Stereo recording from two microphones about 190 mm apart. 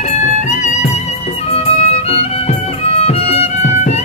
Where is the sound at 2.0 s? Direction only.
30° left (ahead or behind).